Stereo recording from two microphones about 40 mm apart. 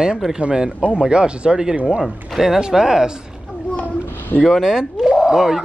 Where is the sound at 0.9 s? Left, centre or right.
Right.